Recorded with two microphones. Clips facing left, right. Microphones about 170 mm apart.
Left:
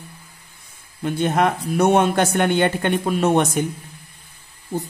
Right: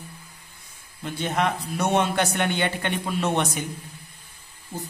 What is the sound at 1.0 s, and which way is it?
A man's voice, 55° left (ahead or behind).